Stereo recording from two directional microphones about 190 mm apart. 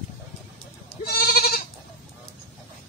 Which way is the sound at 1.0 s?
55° left (ahead or behind).